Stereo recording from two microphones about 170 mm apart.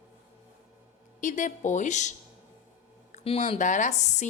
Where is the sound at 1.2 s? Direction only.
50° left (ahead or behind).